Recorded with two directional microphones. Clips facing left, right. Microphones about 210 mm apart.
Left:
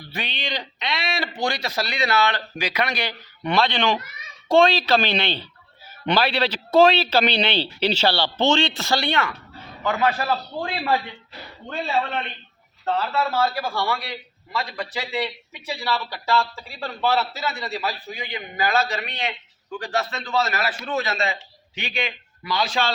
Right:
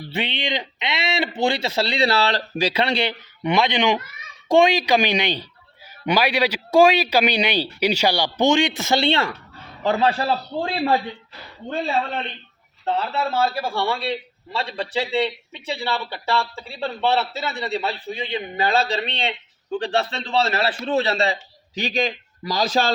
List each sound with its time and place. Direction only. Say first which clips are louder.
0.1 s a man's voice: right 5 dB; 25° right (ahead or behind)
12.8 s a man's voice: even; 25° right (ahead or behind)